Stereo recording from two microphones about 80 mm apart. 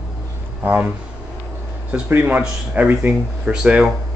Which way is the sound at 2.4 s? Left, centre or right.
Centre.